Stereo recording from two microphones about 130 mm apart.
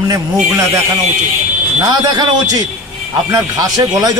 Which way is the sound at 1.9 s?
30° right (ahead or behind).